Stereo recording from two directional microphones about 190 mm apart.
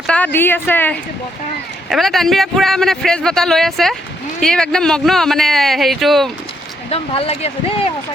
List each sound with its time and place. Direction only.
0.3 s a woman's voice: 10° left (ahead or behind)
6.9 s speech: 30° left (ahead or behind)